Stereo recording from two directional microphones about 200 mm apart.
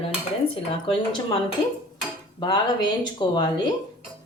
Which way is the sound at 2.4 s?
20° left (ahead or behind).